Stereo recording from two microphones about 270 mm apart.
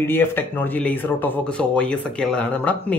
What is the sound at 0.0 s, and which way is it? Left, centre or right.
A woman's voice, centre.